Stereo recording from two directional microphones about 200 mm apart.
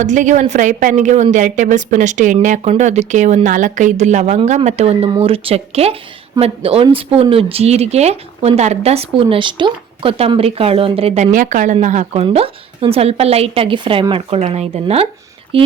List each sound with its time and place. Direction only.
0.0 s a woman's voice: 35° right (ahead or behind)